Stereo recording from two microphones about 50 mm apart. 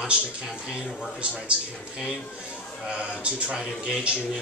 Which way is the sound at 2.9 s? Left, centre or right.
Right.